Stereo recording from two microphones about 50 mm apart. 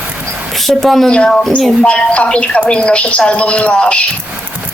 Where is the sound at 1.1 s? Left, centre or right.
Centre.